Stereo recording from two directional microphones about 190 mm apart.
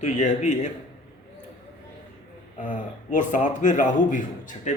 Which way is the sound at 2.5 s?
45° left (ahead or behind).